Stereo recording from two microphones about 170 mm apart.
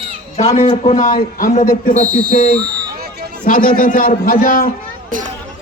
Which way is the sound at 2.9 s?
65° right (ahead or behind).